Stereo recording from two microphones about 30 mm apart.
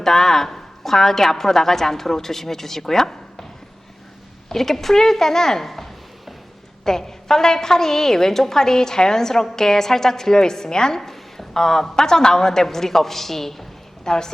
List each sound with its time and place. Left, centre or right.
0.0 s a woman's voice: centre
4.4 s a woman's voice: centre
5.6 s chopping: centre
6.8 s a woman's voice: centre
14.0 s a woman's voice: left